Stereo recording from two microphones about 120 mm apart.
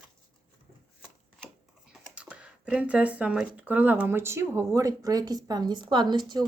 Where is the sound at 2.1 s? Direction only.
10° right (ahead or behind).